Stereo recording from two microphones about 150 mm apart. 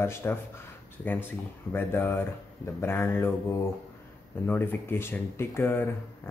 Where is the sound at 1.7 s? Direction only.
15° left (ahead or behind).